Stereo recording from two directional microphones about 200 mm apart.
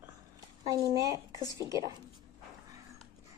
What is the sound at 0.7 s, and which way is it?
Speech, 15° right (ahead or behind).